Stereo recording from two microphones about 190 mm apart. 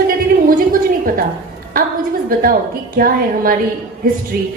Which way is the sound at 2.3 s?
50° right (ahead or behind).